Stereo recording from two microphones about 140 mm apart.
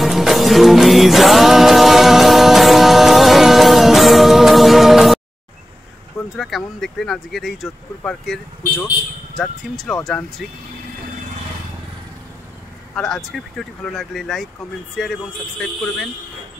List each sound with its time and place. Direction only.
0.0 s music: centre (ahead or behind)
6.3 s speech: centre (ahead or behind)
9.4 s speech: centre (ahead or behind)
12.9 s speech: centre (ahead or behind)